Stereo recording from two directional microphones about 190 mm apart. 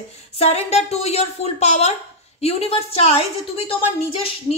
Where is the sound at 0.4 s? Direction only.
35° left (ahead or behind).